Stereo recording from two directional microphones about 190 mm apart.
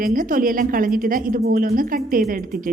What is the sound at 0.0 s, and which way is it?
A woman's voice, 45° right (ahead or behind).